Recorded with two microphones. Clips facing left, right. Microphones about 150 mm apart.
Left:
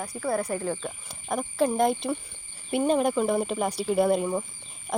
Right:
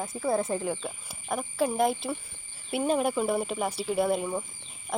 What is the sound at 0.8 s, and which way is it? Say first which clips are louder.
Speech: left 1 dB; 5° right (ahead or behind).